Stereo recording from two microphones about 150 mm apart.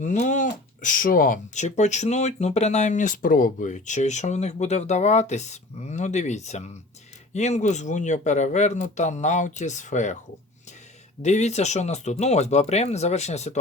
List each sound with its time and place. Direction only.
0.0 s speech: 55° left (ahead or behind)
11.2 s speech: 50° left (ahead or behind)